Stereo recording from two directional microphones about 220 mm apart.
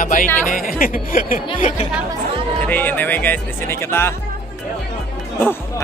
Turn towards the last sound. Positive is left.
turn(degrees=10)  # may be behind; listen again after turning